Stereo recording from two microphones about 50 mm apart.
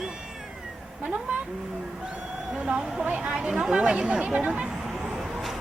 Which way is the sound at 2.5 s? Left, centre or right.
Centre.